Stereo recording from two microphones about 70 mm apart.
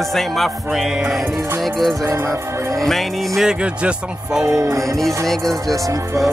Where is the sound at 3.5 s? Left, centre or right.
Centre.